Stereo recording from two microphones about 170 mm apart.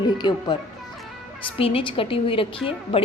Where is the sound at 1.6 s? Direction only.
35° left (ahead or behind).